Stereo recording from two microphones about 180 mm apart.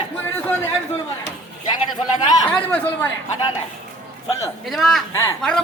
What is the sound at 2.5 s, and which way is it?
Speech, 10° left (ahead or behind).